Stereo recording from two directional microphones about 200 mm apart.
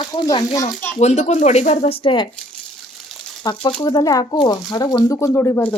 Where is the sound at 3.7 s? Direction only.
20° left (ahead or behind).